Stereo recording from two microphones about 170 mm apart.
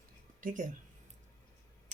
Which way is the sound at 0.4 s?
50° right (ahead or behind).